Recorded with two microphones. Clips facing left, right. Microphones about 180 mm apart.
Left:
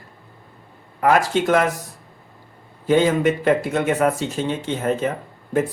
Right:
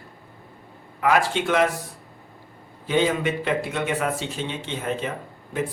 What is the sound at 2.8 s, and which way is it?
Speech, 45° left (ahead or behind).